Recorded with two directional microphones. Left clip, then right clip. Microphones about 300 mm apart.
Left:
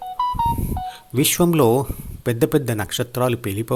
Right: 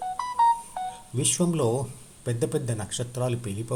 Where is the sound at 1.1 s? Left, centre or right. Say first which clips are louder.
Left 10 dB; left.